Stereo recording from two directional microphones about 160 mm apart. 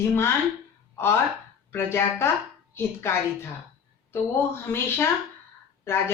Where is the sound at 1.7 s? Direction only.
15° left (ahead or behind).